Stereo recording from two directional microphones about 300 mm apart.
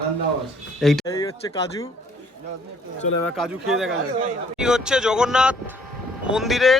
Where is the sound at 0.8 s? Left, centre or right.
Centre.